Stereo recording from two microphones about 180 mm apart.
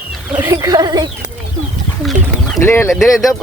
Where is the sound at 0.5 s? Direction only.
20° right (ahead or behind).